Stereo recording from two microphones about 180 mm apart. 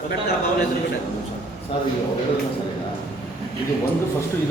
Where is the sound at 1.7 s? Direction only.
30° left (ahead or behind).